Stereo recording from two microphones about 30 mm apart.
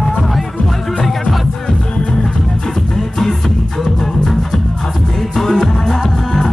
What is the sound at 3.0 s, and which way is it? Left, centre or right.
Music, centre.